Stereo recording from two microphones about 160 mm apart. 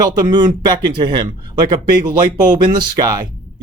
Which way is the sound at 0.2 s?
25° right (ahead or behind).